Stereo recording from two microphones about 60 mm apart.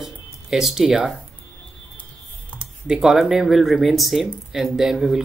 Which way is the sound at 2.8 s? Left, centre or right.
Centre.